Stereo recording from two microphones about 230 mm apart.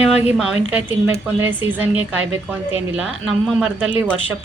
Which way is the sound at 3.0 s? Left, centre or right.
Centre.